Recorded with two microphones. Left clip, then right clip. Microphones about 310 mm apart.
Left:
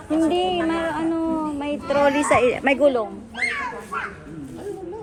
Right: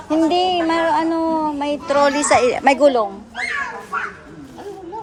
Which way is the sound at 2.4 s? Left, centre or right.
Centre.